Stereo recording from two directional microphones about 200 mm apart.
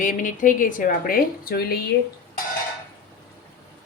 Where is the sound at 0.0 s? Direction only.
40° left (ahead or behind).